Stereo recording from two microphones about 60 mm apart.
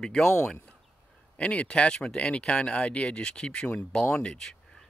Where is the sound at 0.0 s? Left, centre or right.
Centre.